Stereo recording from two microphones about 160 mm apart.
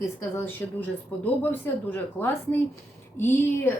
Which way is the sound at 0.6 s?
10° left (ahead or behind).